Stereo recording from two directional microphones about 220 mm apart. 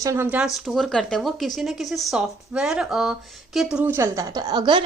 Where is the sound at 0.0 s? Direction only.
10° right (ahead or behind).